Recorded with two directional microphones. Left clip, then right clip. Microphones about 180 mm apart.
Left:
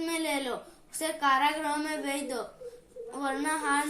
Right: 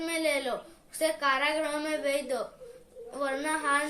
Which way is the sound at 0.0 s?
25° right (ahead or behind).